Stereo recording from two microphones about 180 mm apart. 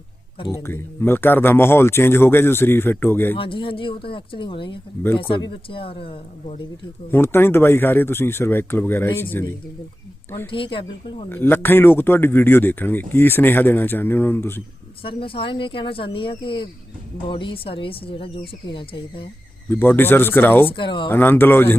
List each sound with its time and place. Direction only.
0.6 s speech: 15° left (ahead or behind)
3.3 s speech: 30° left (ahead or behind)
7.1 s speech: 10° left (ahead or behind)
10.5 s speech: 30° left (ahead or behind)
11.3 s speech: 10° left (ahead or behind)
15.0 s speech: 30° left (ahead or behind)
19.7 s speech: 10° left (ahead or behind)
20.7 s speech: 25° left (ahead or behind)
21.1 s speech: 10° left (ahead or behind)